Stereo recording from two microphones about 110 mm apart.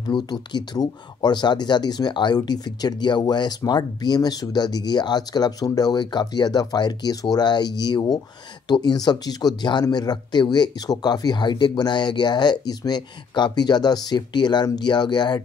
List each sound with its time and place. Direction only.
0.0 s speech: 40° left (ahead or behind)